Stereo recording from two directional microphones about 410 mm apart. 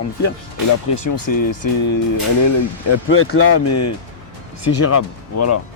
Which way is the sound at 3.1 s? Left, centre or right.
Left.